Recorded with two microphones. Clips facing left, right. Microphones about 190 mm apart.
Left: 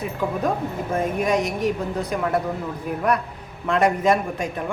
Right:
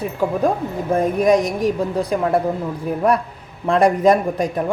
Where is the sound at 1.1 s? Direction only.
35° right (ahead or behind).